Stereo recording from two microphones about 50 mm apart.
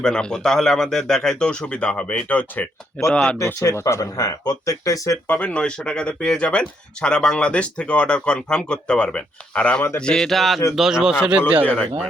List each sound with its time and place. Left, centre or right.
0.0 s speech: centre; by 2.6 s left
3.3 s speech: left
4.7 s speech: left
5.4 s speech: left; by 10.6 s centre
10.8 s a man's voice: centre
11.3 s a man's voice: right
11.6 s speech: left